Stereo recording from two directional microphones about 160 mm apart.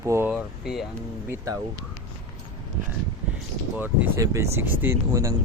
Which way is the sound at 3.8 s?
15° right (ahead or behind).